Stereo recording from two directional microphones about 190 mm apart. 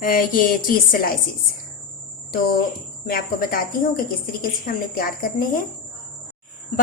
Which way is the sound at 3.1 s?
50° left (ahead or behind).